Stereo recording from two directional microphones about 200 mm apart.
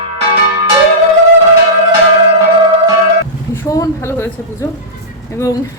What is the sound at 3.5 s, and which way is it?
Speech, 15° left (ahead or behind).